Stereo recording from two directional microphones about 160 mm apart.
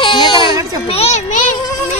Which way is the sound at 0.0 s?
35° left (ahead or behind).